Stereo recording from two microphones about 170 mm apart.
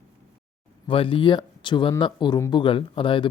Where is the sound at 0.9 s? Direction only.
30° left (ahead or behind).